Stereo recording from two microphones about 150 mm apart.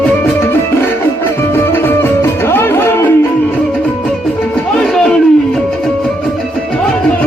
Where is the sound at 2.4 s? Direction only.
15° left (ahead or behind).